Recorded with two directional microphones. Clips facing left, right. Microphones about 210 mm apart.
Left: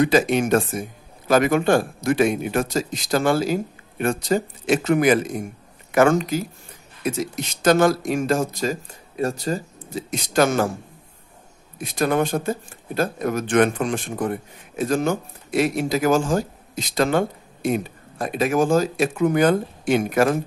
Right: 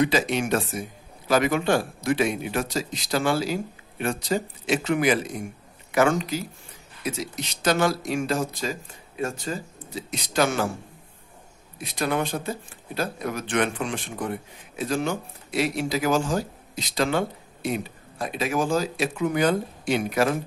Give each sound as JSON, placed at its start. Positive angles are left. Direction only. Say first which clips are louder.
{"t": 0.0, "sound": "a man's voice", "louder": "left 5 dB", "side_deg": 50}
{"t": 11.8, "sound": "speech", "louder": "left 5 dB", "side_deg": 45}